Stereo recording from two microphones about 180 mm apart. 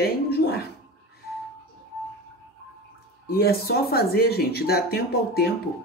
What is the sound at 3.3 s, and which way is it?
Speech, 60° left (ahead or behind).